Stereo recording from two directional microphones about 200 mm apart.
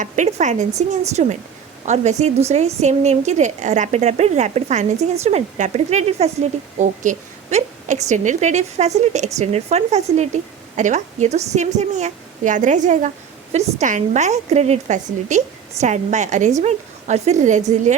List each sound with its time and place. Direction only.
0.0 s a woman's voice: 35° right (ahead or behind)